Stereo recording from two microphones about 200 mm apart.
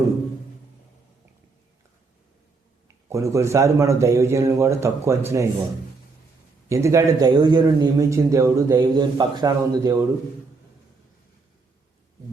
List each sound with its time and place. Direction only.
3.1 s a man's voice: 15° right (ahead or behind)
6.7 s a man's voice: 15° right (ahead or behind)